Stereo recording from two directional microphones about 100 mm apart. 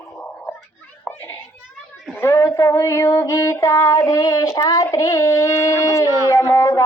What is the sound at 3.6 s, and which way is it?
Child singing, 35° left (ahead or behind).